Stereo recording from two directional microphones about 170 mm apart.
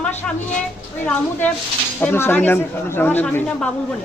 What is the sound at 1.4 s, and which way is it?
Speech, 10° left (ahead or behind).